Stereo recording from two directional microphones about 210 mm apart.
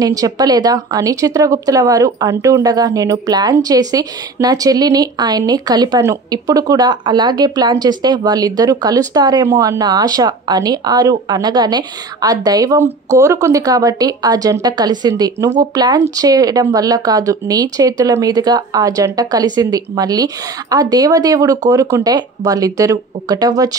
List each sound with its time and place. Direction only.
0.0 s a woman's voice: 15° right (ahead or behind)